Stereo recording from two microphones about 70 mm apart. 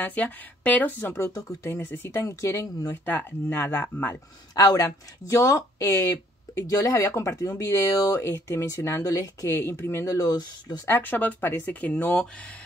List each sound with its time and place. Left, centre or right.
0.0 s speech: left
1.1 s speech: left
2.4 s speech: left
2.9 s speech: left
4.1 s speech: left
7.6 s speech: left
7.9 s speech: left
8.5 s speech: left
9.5 s speech: left
10.0 s speech: left
10.9 s speech: left